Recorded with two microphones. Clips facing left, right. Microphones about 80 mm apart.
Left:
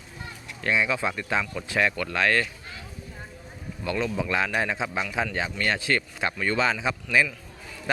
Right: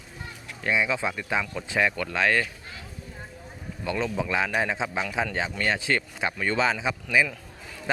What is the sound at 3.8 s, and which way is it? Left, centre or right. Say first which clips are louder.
Speech: even; right.